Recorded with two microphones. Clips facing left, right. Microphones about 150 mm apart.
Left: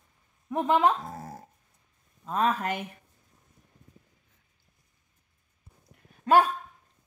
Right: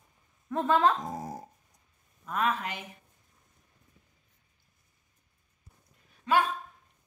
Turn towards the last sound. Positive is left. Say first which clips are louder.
# left 5 dB
turn(degrees=50)  # may be behind; listen again after turning